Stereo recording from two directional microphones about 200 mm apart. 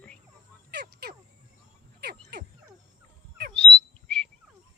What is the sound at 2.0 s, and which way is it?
Frog, 55° right (ahead or behind).